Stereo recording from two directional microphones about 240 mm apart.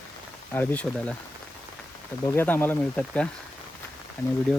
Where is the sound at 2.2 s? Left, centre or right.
Centre.